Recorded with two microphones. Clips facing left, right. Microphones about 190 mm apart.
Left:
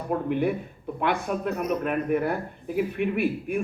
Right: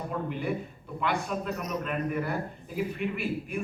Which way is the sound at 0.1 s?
55° left (ahead or behind).